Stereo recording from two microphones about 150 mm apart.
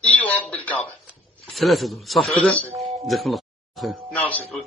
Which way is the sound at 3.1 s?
Centre (ahead or behind).